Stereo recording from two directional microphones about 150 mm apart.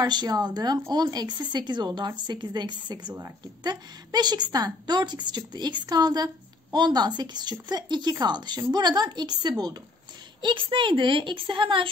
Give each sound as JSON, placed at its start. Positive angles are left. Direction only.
{"t": 0.0, "sound": "a woman's voice", "side_deg": -30}